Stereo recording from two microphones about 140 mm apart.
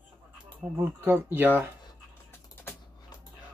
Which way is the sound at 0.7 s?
15° right (ahead or behind).